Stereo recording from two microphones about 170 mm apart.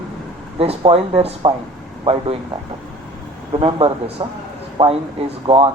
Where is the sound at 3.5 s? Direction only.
30° right (ahead or behind).